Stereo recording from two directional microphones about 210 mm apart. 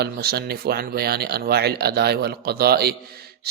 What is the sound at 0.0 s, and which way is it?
Speech, 50° right (ahead or behind).